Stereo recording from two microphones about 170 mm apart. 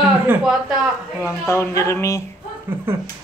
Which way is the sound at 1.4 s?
15° left (ahead or behind).